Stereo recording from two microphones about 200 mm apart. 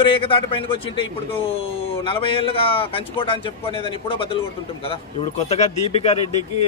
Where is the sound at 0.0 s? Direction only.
25° left (ahead or behind).